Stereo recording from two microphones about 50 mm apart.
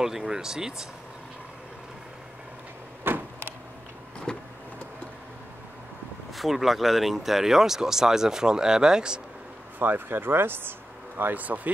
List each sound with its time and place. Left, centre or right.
0.0 s speech: centre
3.1 s power windows: right
4.3 s vehicle: centre
6.3 s speech: centre
9.8 s speech: right
11.1 s speech: right